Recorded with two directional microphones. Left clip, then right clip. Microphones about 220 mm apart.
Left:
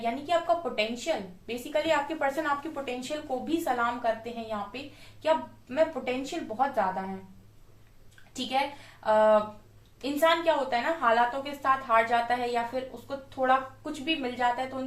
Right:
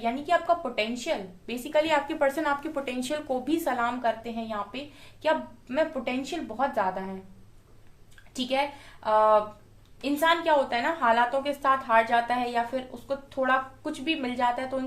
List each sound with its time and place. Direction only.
0.0 s a woman's voice: 45° right (ahead or behind)
9.0 s a woman's voice: 45° right (ahead or behind)